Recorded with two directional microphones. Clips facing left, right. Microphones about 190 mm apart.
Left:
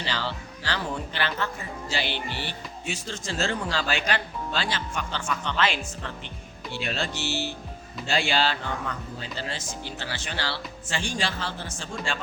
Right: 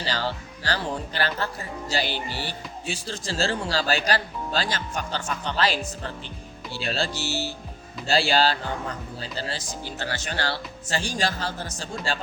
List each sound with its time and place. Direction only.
0.0 s music: 40° right (ahead or behind)
1.9 s speech: 40° right (ahead or behind)